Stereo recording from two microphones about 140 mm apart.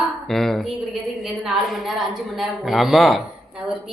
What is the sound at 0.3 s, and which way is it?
A woman's voice, centre (ahead or behind).